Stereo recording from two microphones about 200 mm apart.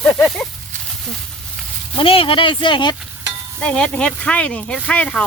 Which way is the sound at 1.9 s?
25° left (ahead or behind).